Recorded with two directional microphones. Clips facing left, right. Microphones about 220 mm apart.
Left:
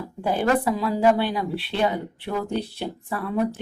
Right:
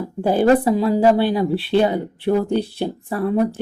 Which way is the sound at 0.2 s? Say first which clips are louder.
Right 7 dB; 35° right (ahead or behind).